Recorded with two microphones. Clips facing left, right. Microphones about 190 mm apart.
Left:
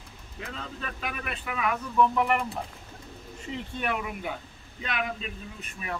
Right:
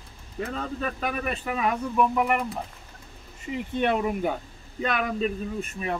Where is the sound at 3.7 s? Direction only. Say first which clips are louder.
Right 9 dB; 30° right (ahead or behind).